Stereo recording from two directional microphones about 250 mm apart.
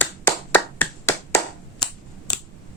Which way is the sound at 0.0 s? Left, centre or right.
Centre.